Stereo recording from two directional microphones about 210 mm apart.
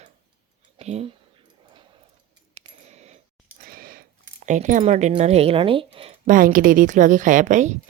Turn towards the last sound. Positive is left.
turn(degrees=-35)  # may be behind; listen again after turning